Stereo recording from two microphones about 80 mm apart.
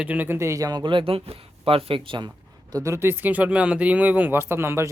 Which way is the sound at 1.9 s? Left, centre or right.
Right.